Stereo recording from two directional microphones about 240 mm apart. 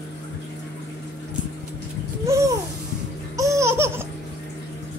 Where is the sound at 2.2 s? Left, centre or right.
Centre.